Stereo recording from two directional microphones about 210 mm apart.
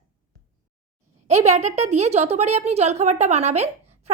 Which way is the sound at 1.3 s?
30° right (ahead or behind).